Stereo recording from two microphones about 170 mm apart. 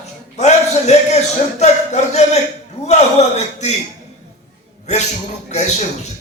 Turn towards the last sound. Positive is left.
turn(degrees=40)  # may be behind; listen again after turning